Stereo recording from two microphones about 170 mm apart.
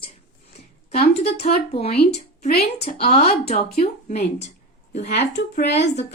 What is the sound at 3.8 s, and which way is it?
Speech, 65° left (ahead or behind).